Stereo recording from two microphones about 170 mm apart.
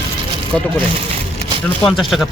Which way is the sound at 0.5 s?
5° left (ahead or behind).